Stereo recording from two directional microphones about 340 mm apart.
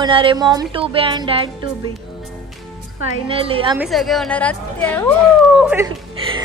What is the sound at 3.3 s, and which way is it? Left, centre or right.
Speech, centre.